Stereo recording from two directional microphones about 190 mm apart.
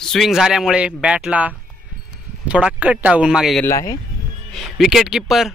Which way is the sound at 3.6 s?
15° left (ahead or behind).